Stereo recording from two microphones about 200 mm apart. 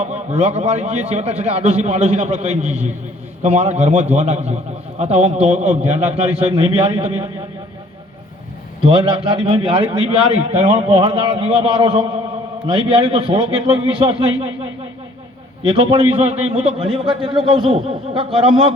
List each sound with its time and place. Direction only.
0.0 s a man's voice: 35° right (ahead or behind)
8.8 s a man's voice: 25° right (ahead or behind)
15.7 s a man's voice: 25° right (ahead or behind)